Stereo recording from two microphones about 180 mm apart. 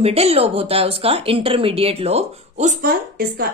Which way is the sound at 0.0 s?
35° right (ahead or behind).